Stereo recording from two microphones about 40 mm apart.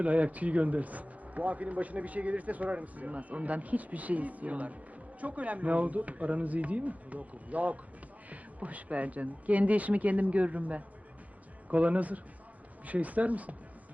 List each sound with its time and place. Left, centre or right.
0.0 s speech: right